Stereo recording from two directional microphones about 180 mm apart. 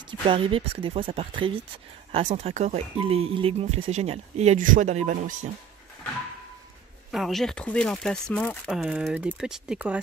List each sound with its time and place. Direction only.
0.3 s speech: 30° right (ahead or behind)
7.1 s speech: centre (ahead or behind)